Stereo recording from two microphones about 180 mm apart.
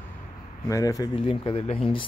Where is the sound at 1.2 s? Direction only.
30° left (ahead or behind).